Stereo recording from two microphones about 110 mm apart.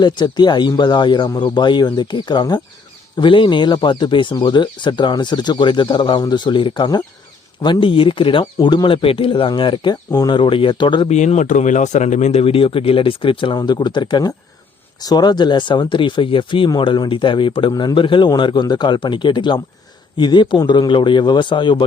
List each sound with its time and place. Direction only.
0.0 s speech: 40° left (ahead or behind)
11.1 s speech: 90° left; by 21.8 s 45° left (ahead or behind)